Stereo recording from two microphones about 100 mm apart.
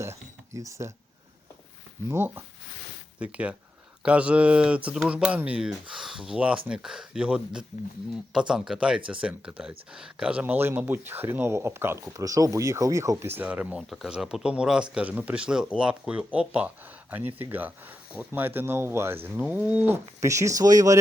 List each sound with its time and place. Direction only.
0.0 s a sound: 30° right (ahead or behind)
2.0 s speech: 25° right (ahead or behind)
3.2 s speech: 10° right (ahead or behind)
12.1 s speech: 35° right (ahead or behind); by 20.0 s 15° right (ahead or behind)
20.2 s speech: 30° right (ahead or behind)